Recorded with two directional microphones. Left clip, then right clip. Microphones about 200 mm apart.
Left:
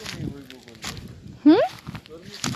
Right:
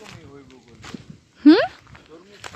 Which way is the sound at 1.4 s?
45° right (ahead or behind).